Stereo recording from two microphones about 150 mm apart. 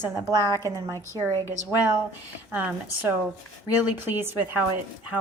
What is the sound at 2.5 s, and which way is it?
A woman's voice, 15° right (ahead or behind).